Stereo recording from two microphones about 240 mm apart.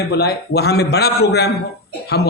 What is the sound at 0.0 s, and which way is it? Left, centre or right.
Speech, left.